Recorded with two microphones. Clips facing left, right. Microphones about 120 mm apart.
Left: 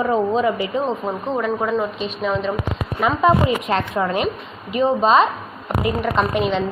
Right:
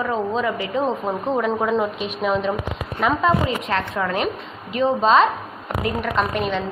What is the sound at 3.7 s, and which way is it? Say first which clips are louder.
Speech: left 3 dB; 20° left (ahead or behind).